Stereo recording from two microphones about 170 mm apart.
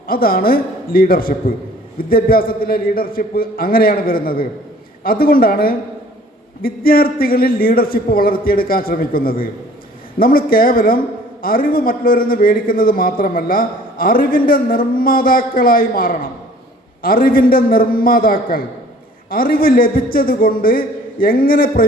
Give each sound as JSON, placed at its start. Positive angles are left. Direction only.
{"t": 0.1, "sound": "a man's voice", "side_deg": 60}